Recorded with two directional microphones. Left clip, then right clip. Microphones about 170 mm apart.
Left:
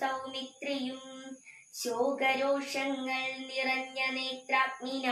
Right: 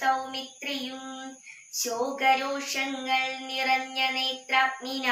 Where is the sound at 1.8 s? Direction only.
10° left (ahead or behind).